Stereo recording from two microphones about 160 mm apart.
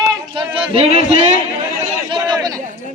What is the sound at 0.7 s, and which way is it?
Speech, 40° right (ahead or behind).